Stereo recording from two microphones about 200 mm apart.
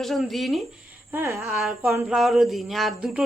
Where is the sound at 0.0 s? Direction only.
Centre (ahead or behind).